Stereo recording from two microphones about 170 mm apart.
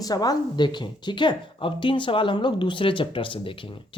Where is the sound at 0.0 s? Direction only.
20° left (ahead or behind).